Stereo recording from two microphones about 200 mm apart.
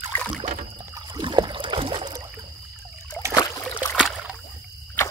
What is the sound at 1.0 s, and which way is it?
Trickle, 20° right (ahead or behind).